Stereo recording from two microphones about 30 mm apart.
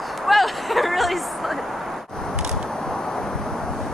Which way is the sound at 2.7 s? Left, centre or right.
Left.